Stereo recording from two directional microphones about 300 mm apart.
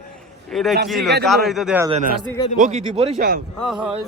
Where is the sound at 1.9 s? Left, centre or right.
Right.